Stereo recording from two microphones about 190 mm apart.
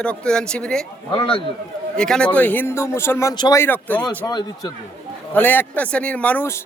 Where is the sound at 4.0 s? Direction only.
20° left (ahead or behind).